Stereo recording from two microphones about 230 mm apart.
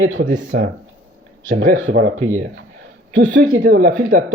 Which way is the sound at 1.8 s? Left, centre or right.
Right.